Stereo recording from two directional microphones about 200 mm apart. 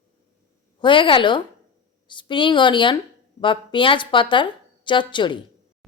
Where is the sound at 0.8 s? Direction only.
25° left (ahead or behind).